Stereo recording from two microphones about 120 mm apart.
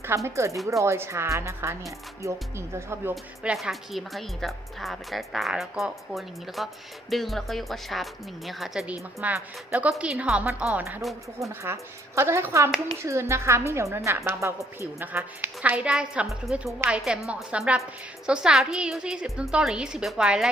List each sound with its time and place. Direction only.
0.0 s speech: 20° right (ahead or behind)
3.4 s a woman's voice: 5° right (ahead or behind)
11.3 s a woman's voice: 25° right (ahead or behind); by 20.5 s 5° right (ahead or behind)